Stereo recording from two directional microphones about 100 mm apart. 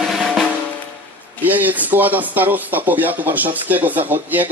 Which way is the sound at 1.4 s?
15° right (ahead or behind).